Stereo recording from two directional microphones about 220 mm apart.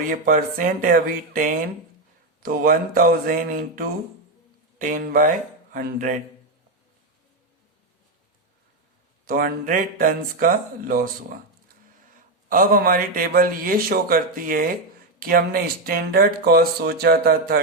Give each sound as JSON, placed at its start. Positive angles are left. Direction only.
{"t": 0.1, "sound": "a man's voice", "side_deg": -40}
{"t": 9.2, "sound": "a man's voice", "side_deg": -40}
{"t": 12.5, "sound": "a man's voice", "side_deg": -40}